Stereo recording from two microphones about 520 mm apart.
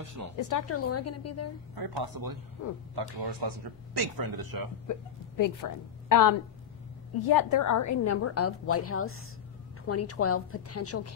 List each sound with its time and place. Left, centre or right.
0.0 s a woman's voice: right
0.4 s a woman's voice: left
1.8 s speech: right
4.9 s a woman's voice: left